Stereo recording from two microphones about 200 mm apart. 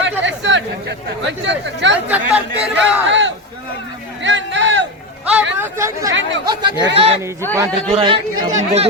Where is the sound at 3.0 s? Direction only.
65° right (ahead or behind).